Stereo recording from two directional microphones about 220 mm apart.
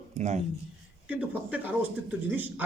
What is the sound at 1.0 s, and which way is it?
A man's voice, 5° right (ahead or behind).